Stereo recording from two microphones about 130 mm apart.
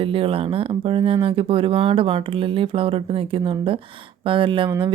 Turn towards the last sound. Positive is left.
turn(degrees=-40)  # may be behind; listen again after turning